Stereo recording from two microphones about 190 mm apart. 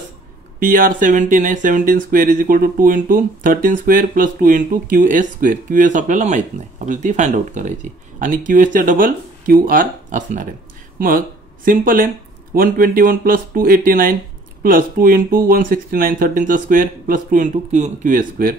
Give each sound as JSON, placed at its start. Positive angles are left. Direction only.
{"t": 0.6, "sound": "speech", "side_deg": -45}